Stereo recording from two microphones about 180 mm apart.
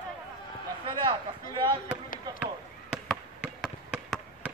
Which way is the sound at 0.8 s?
25° right (ahead or behind).